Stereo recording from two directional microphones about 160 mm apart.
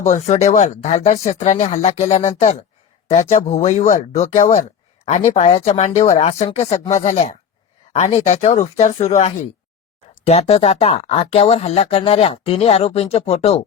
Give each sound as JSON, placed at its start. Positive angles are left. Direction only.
{"t": 0.0, "sound": "speech", "side_deg": 40}